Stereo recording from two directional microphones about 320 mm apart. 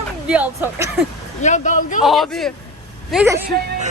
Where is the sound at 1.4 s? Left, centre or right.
Left.